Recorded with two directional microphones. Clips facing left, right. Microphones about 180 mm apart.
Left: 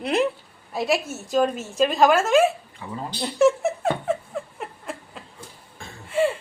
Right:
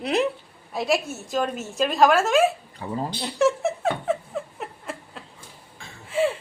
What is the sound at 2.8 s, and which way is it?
Speech, 40° right (ahead or behind).